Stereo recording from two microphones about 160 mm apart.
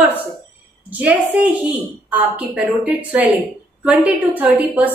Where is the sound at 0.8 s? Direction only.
10° right (ahead or behind).